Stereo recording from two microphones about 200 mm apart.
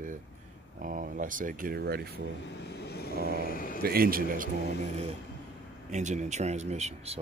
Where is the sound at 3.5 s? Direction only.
45° left (ahead or behind).